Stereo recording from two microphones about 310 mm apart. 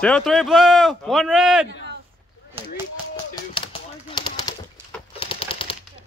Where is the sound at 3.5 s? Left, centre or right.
Centre.